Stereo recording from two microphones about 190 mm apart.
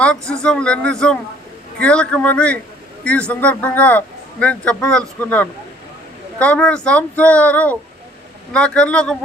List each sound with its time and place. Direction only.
0.0 s a man's voice: 5° left (ahead or behind)